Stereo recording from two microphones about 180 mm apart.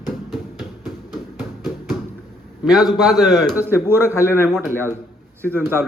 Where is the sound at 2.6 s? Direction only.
Centre (ahead or behind).